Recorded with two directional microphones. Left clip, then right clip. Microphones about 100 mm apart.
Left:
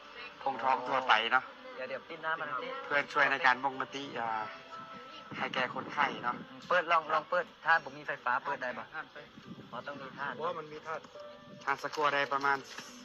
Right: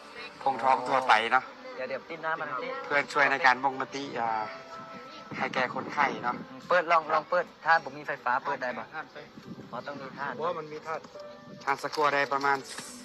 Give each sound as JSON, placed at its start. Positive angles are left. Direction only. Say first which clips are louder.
{"t": 0.2, "sound": "a man's voice", "louder": "right 6 dB", "side_deg": -40}